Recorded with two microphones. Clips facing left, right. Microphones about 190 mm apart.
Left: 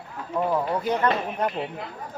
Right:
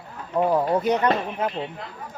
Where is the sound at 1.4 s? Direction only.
5° right (ahead or behind).